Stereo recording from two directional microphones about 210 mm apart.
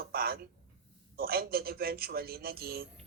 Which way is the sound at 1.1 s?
45° right (ahead or behind).